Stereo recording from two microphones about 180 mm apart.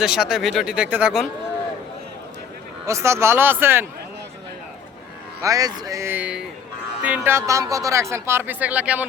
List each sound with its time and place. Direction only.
0.0 s speech: 5° right (ahead or behind)
2.8 s speech: 15° right (ahead or behind)
5.4 s speech: 20° right (ahead or behind)